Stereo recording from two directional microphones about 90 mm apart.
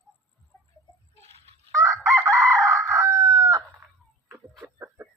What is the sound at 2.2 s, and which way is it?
Chicken, 35° right (ahead or behind).